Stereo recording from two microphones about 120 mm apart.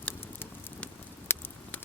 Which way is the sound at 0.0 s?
10° left (ahead or behind).